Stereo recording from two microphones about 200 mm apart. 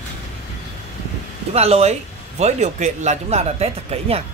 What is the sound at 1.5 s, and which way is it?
Speech, 30° right (ahead or behind).